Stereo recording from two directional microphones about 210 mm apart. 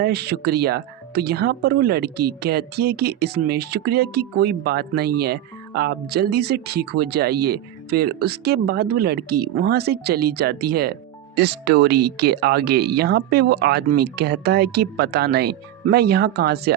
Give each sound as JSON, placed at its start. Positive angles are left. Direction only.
{"t": 0.0, "sound": "speech", "side_deg": -50}